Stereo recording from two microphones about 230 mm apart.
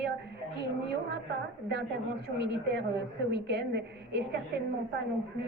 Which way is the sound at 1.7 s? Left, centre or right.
Right.